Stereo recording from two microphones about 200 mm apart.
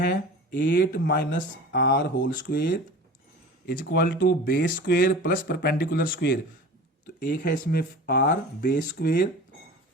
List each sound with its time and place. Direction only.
0.6 s speech: 60° left (ahead or behind)
3.7 s speech: 50° left (ahead or behind)
7.4 s speech: 50° left (ahead or behind)